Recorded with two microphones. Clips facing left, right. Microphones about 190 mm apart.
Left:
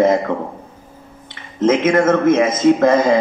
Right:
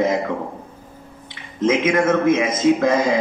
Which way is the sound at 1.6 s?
45° left (ahead or behind).